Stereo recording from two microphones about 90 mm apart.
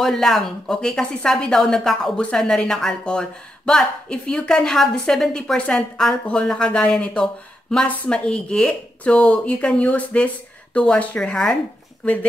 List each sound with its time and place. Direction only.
0.0 s speech: 5° left (ahead or behind)